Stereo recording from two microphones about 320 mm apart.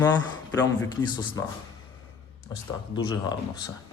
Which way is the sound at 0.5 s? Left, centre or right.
Centre.